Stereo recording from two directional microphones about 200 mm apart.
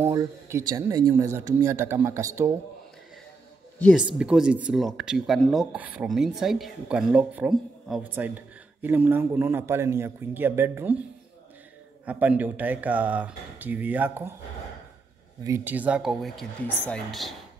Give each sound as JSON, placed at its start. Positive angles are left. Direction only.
{"t": 0.0, "sound": "speech", "side_deg": -15}
{"t": 3.8, "sound": "speech", "side_deg": -5}
{"t": 12.1, "sound": "speech", "side_deg": -5}
{"t": 15.4, "sound": "speech", "side_deg": -10}